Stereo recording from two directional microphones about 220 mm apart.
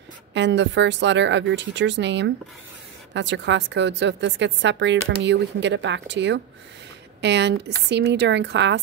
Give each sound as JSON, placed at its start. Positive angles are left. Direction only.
{"t": 0.3, "sound": "a woman's voice", "side_deg": -55}